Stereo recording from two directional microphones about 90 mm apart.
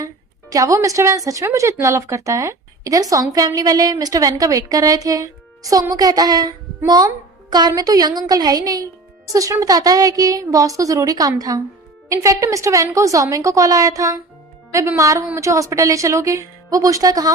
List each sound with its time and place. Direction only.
0.5 s speech: 40° right (ahead or behind)